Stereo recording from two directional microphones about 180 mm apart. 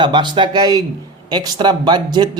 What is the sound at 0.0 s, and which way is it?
Speech, 25° right (ahead or behind).